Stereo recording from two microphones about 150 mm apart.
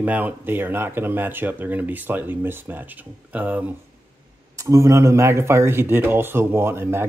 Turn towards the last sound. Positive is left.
turn(degrees=-15)  # may be behind; listen again after turning